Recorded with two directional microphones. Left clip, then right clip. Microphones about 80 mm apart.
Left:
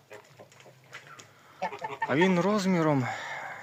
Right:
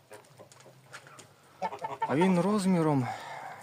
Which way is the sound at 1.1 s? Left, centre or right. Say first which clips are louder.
Left 3 dB; left.